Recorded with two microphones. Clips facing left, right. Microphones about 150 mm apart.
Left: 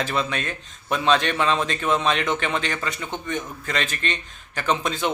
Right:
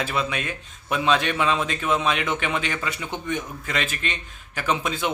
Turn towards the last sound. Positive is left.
turn(degrees=-5)  # may be behind; listen again after turning